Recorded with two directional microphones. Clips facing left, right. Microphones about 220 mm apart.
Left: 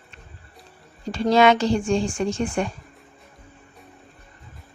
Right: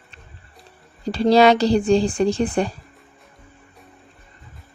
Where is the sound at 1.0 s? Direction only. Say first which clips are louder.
Right 3 dB; 35° right (ahead or behind).